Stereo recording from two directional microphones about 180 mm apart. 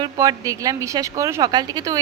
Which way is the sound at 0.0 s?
20° right (ahead or behind).